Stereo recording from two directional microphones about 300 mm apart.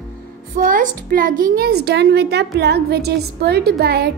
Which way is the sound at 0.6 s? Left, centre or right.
Right.